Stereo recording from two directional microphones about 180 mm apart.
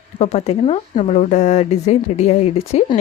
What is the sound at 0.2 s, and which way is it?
Speech, 35° left (ahead or behind).